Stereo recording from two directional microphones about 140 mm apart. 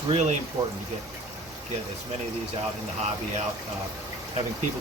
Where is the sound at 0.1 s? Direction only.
55° right (ahead or behind).